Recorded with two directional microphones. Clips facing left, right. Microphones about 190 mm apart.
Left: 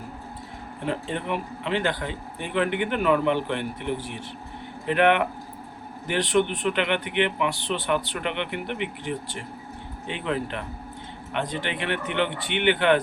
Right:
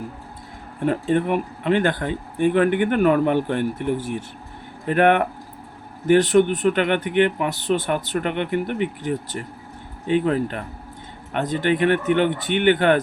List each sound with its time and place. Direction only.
0.9 s speech: 50° right (ahead or behind)